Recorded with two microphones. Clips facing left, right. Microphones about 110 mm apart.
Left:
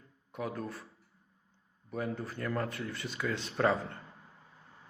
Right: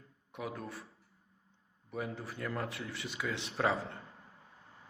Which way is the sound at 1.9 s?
5° right (ahead or behind).